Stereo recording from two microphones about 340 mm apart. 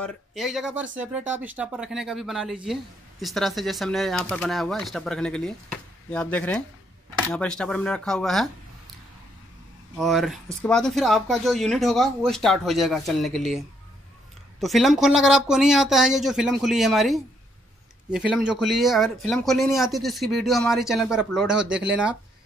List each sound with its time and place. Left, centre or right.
0.0 s speech: centre
9.9 s speech: centre